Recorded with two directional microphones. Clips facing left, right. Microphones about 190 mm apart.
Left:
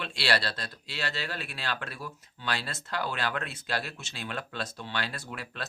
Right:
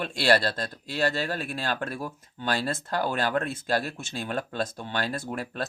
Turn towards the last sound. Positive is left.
turn(degrees=-45)  # may be behind; listen again after turning